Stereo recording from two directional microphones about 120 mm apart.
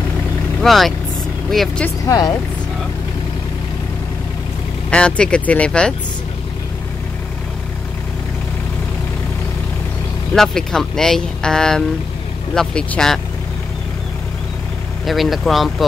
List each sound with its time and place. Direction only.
0.6 s speech: centre (ahead or behind)
2.0 s speech: 35° left (ahead or behind)
4.9 s speech: 10° left (ahead or behind)
10.3 s speech: 5° left (ahead or behind)
15.0 s speech: centre (ahead or behind)